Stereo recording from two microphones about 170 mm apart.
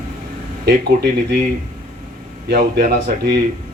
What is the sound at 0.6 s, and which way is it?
Speech, 70° right (ahead or behind).